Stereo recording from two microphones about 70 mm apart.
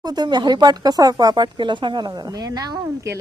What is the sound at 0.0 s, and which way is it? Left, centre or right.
Speech, right.